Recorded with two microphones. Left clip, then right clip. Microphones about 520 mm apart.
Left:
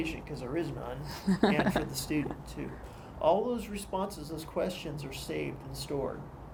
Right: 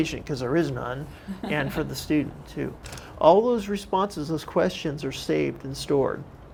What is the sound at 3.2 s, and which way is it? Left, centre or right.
Speech, right.